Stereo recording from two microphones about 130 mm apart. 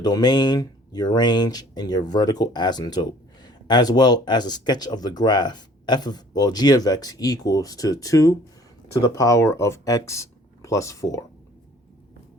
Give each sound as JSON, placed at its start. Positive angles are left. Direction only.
{"t": 0.0, "sound": "speech", "side_deg": 30}